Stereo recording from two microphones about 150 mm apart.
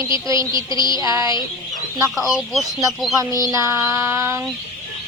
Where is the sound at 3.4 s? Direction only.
20° right (ahead or behind).